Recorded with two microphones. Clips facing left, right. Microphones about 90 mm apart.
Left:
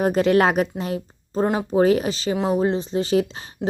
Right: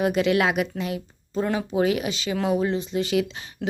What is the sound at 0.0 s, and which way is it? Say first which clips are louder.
Speech: left 4 dB; 40° left (ahead or behind).